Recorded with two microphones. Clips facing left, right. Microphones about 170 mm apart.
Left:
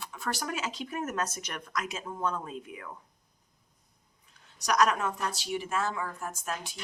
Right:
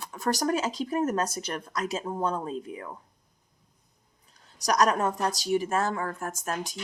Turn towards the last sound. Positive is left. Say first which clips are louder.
# right 4 dB
turn(degrees=-45)  # may be behind; listen again after turning